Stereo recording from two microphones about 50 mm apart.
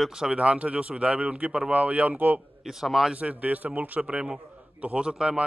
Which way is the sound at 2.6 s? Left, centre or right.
Centre.